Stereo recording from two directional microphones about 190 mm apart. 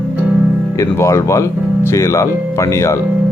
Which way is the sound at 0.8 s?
15° left (ahead or behind).